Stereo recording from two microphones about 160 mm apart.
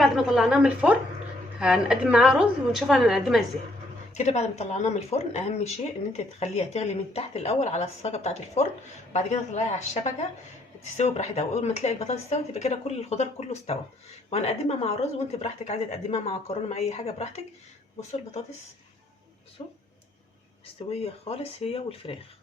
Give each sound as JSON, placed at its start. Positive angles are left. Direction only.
{"t": 0.0, "sound": "a woman's voice", "side_deg": 0}
{"t": 4.2, "sound": "speech", "side_deg": 45}
{"t": 19.6, "sound": "speech", "side_deg": 35}